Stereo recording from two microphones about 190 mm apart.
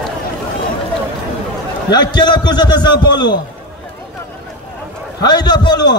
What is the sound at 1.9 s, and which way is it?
A man's voice, 20° left (ahead or behind).